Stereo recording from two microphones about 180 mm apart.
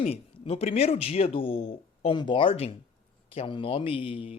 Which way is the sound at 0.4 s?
35° left (ahead or behind).